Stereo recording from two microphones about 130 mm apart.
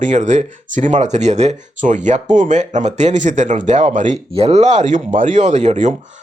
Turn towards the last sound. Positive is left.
turn(degrees=-65)  # may be behind; listen again after turning